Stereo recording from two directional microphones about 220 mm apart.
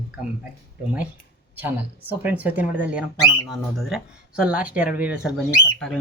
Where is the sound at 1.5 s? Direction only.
10° right (ahead or behind).